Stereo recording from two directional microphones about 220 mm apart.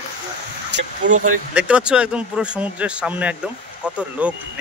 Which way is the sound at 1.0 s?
35° right (ahead or behind).